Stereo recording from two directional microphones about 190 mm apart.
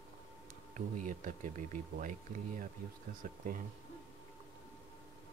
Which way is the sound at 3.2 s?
45° right (ahead or behind).